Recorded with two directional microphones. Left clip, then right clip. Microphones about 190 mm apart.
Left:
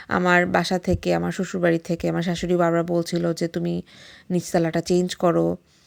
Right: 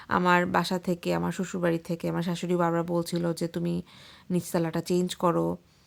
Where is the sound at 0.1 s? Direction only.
15° left (ahead or behind).